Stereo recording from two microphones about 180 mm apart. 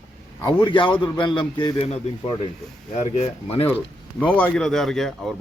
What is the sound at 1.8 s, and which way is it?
A man's voice, 35° left (ahead or behind).